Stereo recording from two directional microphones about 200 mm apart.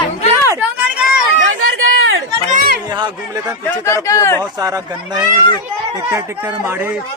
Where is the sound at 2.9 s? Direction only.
20° right (ahead or behind).